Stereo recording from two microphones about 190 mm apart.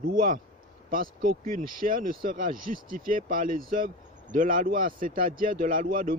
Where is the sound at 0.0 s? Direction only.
50° right (ahead or behind).